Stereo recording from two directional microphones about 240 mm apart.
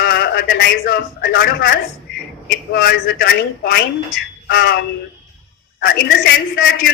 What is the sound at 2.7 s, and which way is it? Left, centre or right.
Speech, left.